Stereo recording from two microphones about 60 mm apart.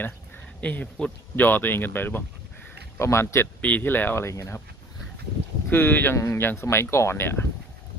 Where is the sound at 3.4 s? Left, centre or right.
Left.